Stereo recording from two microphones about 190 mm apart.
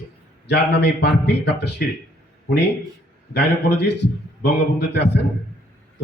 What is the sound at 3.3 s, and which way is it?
A man's voice, 60° left (ahead or behind).